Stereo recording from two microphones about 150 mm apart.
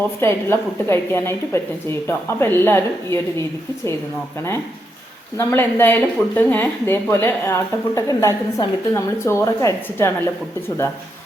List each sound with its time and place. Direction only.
0.2 s a woman's voice: 15° left (ahead or behind)
5.4 s a woman's voice: 15° left (ahead or behind)